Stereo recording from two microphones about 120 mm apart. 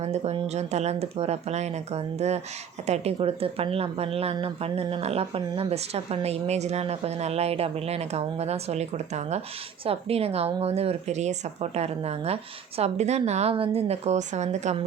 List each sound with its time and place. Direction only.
0.0 s speech: 65° right (ahead or behind)
9.8 s speech: 55° right (ahead or behind); by 14.8 s 70° right (ahead or behind)